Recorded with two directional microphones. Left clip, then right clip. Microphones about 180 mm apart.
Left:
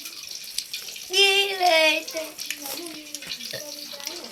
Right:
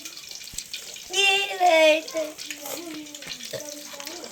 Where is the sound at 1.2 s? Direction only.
35° right (ahead or behind).